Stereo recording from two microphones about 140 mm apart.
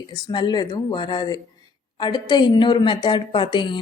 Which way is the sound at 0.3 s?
30° left (ahead or behind).